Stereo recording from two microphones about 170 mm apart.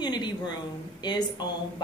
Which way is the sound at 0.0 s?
25° left (ahead or behind).